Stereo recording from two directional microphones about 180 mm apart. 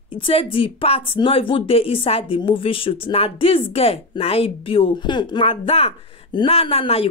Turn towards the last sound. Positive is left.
turn(degrees=35)  # may be behind; listen again after turning